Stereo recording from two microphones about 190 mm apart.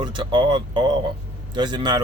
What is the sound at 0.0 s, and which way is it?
Speech, 25° right (ahead or behind).